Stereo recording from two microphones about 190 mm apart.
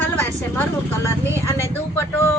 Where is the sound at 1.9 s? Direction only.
15° left (ahead or behind).